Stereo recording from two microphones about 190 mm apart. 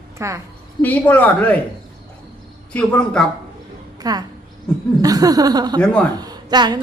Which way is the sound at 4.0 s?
20° right (ahead or behind).